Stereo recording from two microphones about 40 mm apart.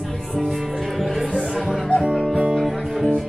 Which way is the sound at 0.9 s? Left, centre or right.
Centre.